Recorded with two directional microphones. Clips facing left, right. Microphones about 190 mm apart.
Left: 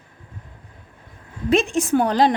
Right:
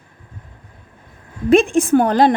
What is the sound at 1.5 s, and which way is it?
Speech, 50° right (ahead or behind).